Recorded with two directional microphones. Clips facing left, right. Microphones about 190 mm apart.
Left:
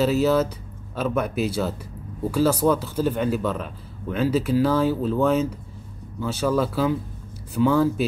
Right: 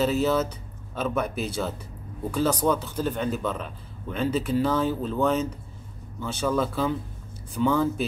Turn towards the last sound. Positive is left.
turn(degrees=5)  # may be behind; listen again after turning